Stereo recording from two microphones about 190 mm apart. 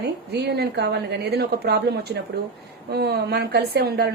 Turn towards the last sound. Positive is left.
turn(degrees=-55)  # may be behind; listen again after turning